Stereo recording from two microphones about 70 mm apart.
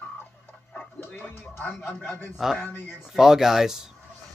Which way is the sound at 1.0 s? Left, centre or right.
Left.